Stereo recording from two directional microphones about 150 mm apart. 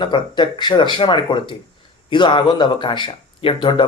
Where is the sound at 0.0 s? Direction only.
30° left (ahead or behind).